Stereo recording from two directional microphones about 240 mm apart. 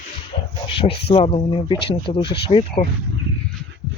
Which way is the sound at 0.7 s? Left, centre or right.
Left.